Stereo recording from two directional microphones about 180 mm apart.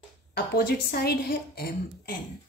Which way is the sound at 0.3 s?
60° left (ahead or behind).